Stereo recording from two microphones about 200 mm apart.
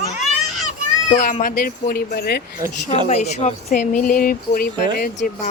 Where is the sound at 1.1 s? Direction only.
40° left (ahead or behind).